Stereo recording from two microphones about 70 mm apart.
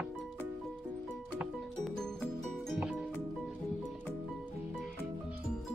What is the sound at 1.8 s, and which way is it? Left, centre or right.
Music, centre.